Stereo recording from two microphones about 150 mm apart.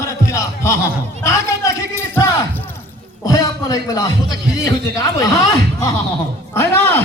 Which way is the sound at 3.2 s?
25° left (ahead or behind).